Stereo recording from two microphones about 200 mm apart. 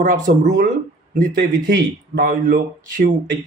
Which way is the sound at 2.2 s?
45° right (ahead or behind).